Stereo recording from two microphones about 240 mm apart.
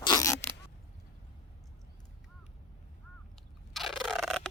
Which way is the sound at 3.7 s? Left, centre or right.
Centre.